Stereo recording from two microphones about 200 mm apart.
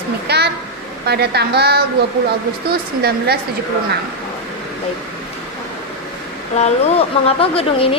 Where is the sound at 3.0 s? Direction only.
50° right (ahead or behind).